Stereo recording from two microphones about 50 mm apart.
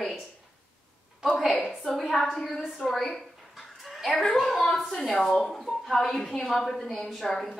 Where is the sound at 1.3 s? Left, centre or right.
Centre.